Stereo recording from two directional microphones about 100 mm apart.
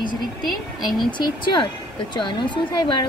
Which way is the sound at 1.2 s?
50° left (ahead or behind).